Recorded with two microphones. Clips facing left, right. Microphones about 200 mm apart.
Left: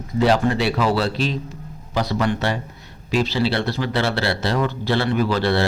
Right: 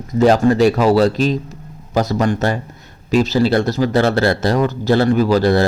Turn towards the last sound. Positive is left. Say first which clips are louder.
# right 6 dB
turn(degrees=-40)  # may be behind; listen again after turning